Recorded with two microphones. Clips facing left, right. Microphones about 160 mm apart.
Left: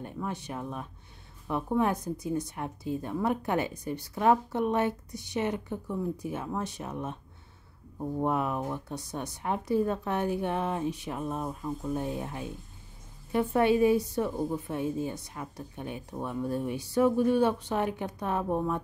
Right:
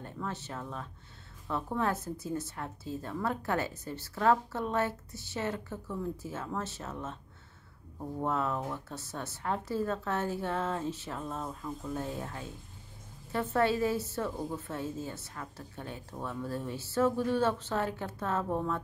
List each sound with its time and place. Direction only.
0.0 s a woman's voice: 15° left (ahead or behind)